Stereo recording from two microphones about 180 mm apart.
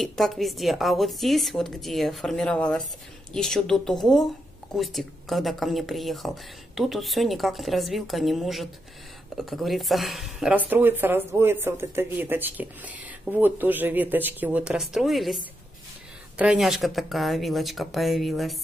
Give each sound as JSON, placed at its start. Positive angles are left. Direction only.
{"t": 0.0, "sound": "speech", "side_deg": 0}